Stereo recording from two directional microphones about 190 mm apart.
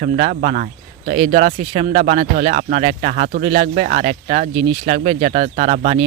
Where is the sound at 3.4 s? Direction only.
30° right (ahead or behind).